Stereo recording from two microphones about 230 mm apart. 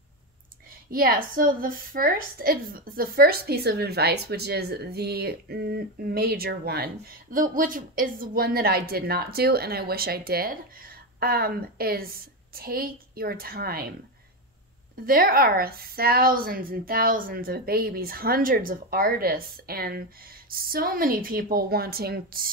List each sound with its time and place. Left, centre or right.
0.8 s a woman's voice: right
15.0 s a woman's voice: right